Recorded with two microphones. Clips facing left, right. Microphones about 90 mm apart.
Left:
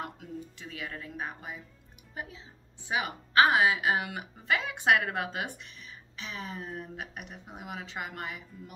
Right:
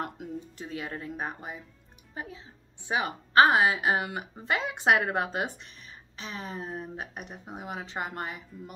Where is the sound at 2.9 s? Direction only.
35° right (ahead or behind).